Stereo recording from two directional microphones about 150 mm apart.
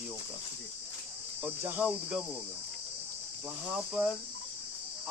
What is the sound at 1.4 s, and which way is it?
Cricket, 10° right (ahead or behind).